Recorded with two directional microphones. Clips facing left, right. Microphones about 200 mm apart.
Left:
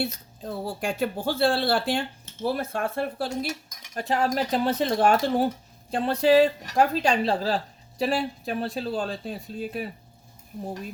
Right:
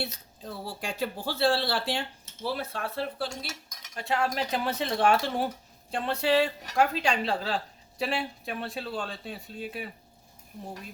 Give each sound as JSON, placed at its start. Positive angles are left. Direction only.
{"t": 0.0, "sound": "a woman's voice", "side_deg": 50}